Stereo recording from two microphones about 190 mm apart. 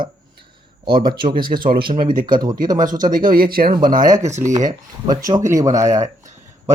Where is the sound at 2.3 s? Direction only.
20° right (ahead or behind).